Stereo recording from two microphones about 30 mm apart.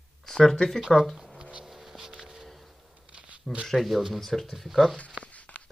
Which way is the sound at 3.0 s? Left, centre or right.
Right.